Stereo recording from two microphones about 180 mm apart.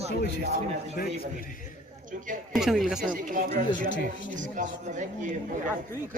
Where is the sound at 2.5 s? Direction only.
Centre (ahead or behind).